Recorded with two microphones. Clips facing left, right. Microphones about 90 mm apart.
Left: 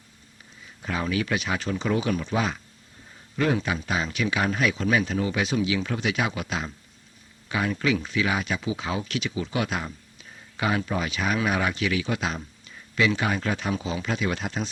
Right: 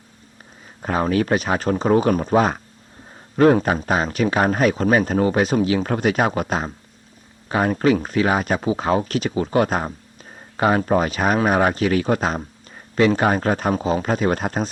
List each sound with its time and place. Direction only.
0.6 s speech: 45° right (ahead or behind)